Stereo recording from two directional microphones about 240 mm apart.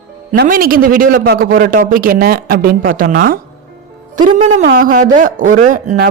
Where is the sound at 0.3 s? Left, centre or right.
Right.